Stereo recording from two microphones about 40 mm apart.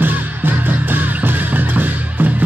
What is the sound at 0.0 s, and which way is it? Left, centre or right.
Music, right.